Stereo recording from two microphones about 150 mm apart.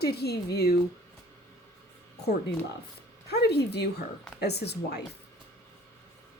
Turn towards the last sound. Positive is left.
turn(degrees=90)